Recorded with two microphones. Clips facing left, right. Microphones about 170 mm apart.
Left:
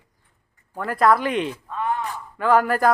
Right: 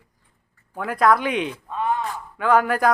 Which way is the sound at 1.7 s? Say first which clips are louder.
Right 1 dB; 20° right (ahead or behind).